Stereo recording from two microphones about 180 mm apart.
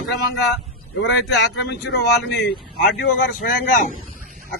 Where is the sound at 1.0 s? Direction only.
75° left (ahead or behind).